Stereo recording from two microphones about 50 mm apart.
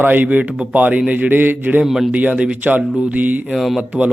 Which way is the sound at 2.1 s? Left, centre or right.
Right.